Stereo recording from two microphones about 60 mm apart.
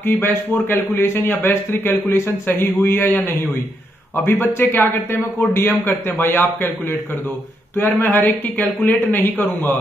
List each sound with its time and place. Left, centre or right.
0.0 s speech: left
4.6 s speech: left